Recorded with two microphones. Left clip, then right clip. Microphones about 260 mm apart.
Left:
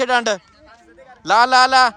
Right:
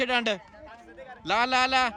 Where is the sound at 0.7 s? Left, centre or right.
Right.